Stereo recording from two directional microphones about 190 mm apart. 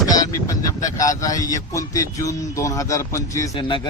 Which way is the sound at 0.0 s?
20° left (ahead or behind).